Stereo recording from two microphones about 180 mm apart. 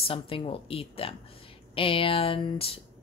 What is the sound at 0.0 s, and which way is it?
Speech, 30° left (ahead or behind).